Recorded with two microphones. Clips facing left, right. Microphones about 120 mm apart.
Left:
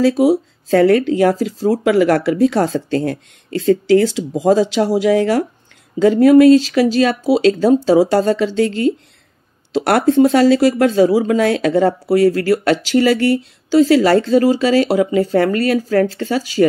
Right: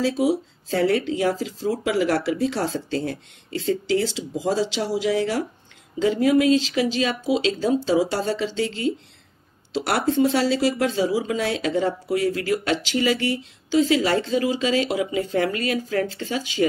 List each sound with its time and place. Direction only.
0.1 s speech: 85° left; by 1.3 s 55° left (ahead or behind)
1.4 s speech: 45° left (ahead or behind)
1.9 s speech: 55° left (ahead or behind)
11.1 s speech: 55° left (ahead or behind); by 12.2 s 70° left (ahead or behind)
12.2 s speech: 50° left (ahead or behind)